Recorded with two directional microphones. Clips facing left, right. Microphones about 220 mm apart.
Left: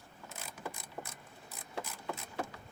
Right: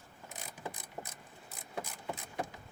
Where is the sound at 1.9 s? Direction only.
15° right (ahead or behind).